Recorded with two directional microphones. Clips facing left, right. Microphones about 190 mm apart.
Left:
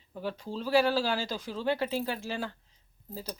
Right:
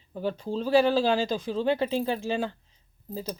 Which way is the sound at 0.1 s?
25° right (ahead or behind).